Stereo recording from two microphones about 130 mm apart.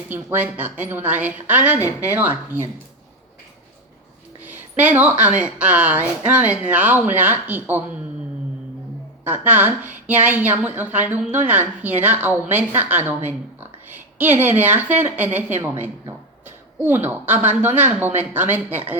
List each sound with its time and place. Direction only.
0.1 s a woman's voice: 15° right (ahead or behind)
4.4 s a woman's voice: 15° right (ahead or behind)
9.2 s a woman's voice: 15° right (ahead or behind)